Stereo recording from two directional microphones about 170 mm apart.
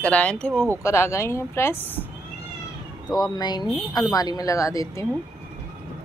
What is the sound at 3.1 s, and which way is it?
A woman's voice, 25° left (ahead or behind).